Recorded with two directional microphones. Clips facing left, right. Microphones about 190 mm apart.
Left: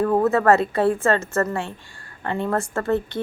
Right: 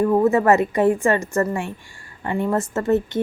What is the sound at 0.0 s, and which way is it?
A woman's voice, 15° right (ahead or behind).